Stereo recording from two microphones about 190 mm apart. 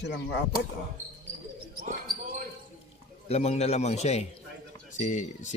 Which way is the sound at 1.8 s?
45° right (ahead or behind).